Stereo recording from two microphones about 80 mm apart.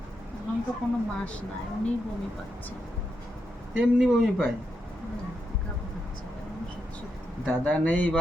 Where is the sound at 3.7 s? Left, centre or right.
Centre.